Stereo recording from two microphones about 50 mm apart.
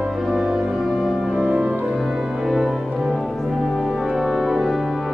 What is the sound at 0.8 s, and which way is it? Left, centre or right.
Music, centre.